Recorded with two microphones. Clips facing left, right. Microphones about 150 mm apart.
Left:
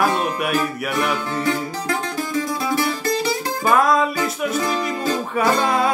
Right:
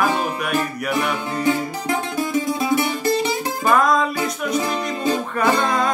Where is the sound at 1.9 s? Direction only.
20° right (ahead or behind).